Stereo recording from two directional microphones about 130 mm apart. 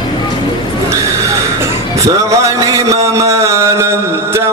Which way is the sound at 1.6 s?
25° right (ahead or behind).